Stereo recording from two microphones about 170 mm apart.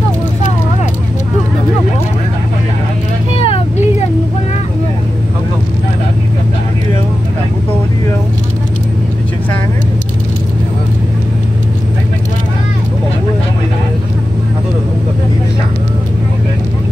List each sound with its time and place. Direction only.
3.3 s vehicle: 35° left (ahead or behind)